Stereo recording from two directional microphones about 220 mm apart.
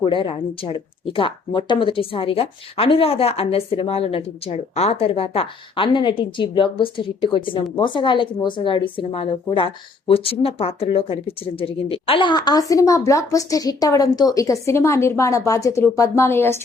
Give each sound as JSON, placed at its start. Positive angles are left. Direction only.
{"t": 0.0, "sound": "a woman's voice", "side_deg": 20}